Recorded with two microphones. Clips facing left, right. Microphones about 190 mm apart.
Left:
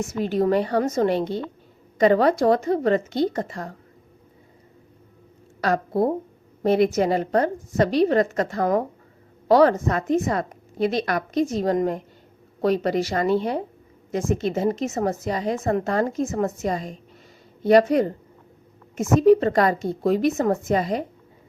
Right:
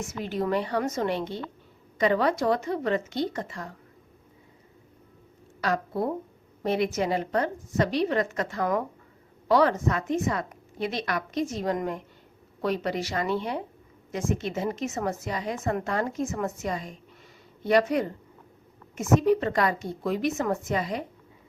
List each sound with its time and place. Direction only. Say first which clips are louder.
0.2 s a woman's voice: left 7 dB; 35° left (ahead or behind)
5.5 s a woman's voice: left 6 dB; 40° left (ahead or behind)